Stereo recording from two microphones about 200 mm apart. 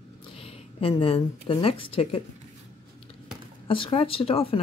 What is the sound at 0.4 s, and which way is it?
Speech, 30° left (ahead or behind).